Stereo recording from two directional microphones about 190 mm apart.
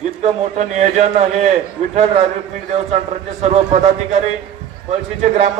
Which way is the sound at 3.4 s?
35° right (ahead or behind).